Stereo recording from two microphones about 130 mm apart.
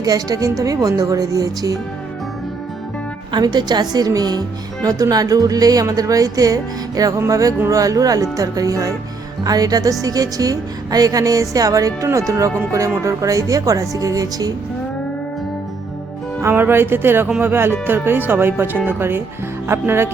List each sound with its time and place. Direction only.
0.0 s speech: 30° right (ahead or behind)
3.3 s speech: 35° right (ahead or behind)
16.4 s speech: 15° right (ahead or behind)
17.2 s speech: 5° right (ahead or behind)
17.5 s speech: 15° right (ahead or behind)